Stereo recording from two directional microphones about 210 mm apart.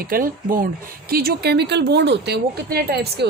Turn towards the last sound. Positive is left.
turn(degrees=-50)  # may be behind; listen again after turning